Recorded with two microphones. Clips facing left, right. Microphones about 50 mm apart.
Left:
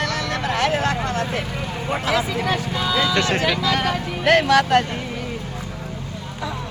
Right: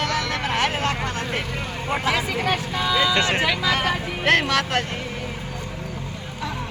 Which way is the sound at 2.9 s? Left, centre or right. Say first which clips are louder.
Even; right.